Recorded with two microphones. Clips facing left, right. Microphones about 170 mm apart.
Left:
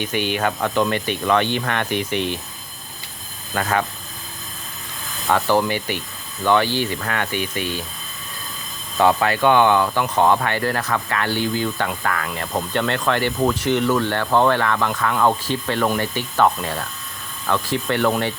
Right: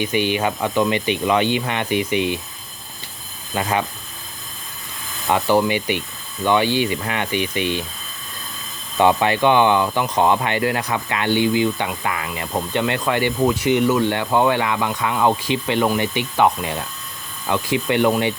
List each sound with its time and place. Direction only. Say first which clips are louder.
0.0 s speech: right 3 dB; 50° left (ahead or behind)
0.3 s speech: right 1 dB; 10° right (ahead or behind)
3.5 s speech: even; 10° right (ahead or behind)
5.3 s speech: right 1 dB; 15° right (ahead or behind)
7.3 s speech: right 3 dB; 45° left (ahead or behind)
9.1 s speech: even; 15° right (ahead or behind)